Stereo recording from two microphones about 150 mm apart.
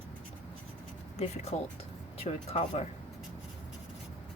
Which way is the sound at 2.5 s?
40° left (ahead or behind).